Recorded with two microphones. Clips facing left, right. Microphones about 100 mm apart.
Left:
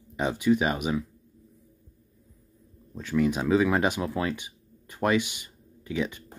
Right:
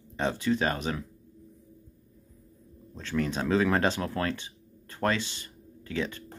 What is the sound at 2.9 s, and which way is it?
Speech, 10° left (ahead or behind).